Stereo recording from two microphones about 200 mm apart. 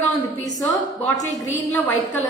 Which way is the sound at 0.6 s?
15° left (ahead or behind).